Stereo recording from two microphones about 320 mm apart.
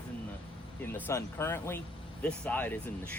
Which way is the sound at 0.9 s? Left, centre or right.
Centre.